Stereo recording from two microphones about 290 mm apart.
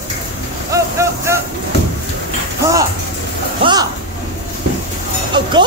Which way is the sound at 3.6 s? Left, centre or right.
Centre.